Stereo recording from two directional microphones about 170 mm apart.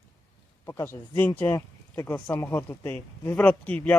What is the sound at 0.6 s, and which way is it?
Speech, 15° left (ahead or behind).